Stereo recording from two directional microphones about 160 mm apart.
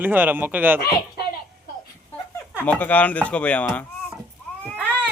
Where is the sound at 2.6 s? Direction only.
10° left (ahead or behind).